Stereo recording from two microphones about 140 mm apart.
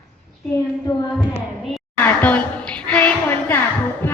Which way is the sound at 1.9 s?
10° left (ahead or behind).